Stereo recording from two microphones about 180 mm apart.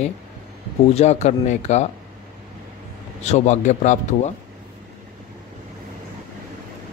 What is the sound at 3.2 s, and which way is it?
Speech, 40° left (ahead or behind).